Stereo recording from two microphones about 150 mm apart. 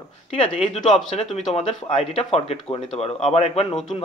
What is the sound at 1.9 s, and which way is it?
Speech, 40° left (ahead or behind).